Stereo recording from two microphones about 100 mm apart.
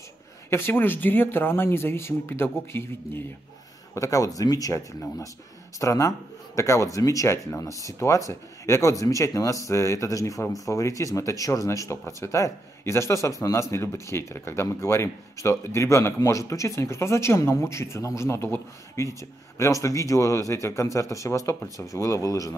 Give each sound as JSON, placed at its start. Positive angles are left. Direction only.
{"t": 0.5, "sound": "speech", "side_deg": 25}
{"t": 3.9, "sound": "speech", "side_deg": 35}